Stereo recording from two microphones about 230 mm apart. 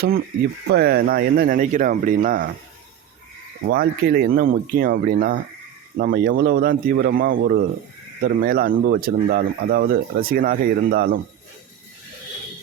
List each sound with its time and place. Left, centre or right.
0.7 s speech: right
3.7 s speech: right